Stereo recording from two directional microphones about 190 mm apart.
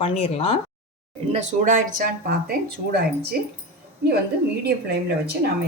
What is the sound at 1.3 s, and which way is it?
Speech, 40° right (ahead or behind).